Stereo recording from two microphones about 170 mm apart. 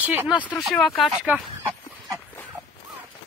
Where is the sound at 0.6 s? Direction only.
5° left (ahead or behind).